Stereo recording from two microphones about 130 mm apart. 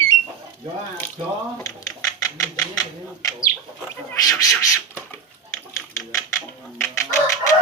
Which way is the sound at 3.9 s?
25° left (ahead or behind).